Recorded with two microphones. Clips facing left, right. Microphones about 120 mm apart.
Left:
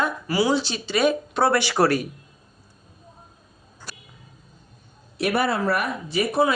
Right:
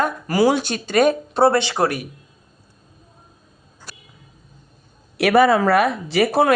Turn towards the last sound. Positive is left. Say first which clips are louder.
# right 5 dB
turn(degrees=-75)  # may be behind; listen again after turning